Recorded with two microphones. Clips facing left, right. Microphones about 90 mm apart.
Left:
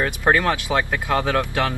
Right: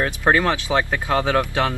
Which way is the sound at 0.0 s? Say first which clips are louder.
Even; 15° right (ahead or behind).